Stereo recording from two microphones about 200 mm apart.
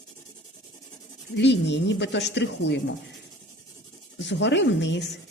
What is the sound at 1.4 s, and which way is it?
Rub, 60° left (ahead or behind).